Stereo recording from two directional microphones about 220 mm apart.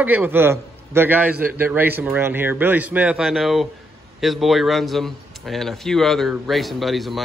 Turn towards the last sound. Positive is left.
turn(degrees=0)  # may be behind; listen again after turning